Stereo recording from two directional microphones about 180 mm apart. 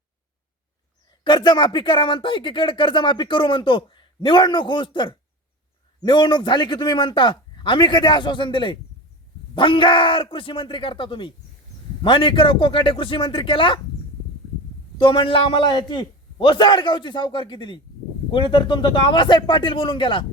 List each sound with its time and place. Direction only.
1.2 s speech: 25° left (ahead or behind)
14.9 s speech: 30° left (ahead or behind)